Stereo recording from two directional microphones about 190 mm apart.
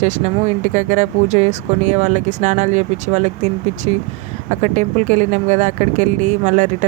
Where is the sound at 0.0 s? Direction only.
40° right (ahead or behind).